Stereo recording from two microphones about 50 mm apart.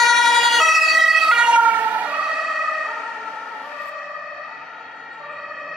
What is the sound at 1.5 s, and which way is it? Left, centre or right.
Emergency vehicle, right.